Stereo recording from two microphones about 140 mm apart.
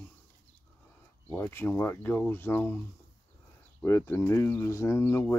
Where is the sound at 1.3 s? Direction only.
15° left (ahead or behind).